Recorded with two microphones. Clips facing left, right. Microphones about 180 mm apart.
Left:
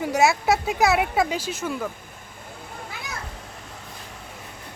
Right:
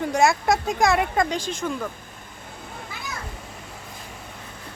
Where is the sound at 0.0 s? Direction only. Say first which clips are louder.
Even; 5° left (ahead or behind).